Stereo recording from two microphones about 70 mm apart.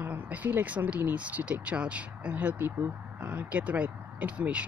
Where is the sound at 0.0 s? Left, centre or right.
Right.